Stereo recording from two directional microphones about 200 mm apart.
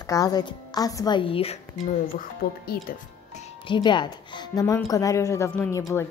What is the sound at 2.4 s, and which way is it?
Speech, 50° left (ahead or behind).